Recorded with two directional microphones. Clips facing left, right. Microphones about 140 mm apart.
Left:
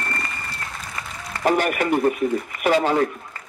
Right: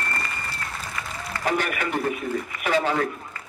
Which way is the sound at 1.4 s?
40° left (ahead or behind).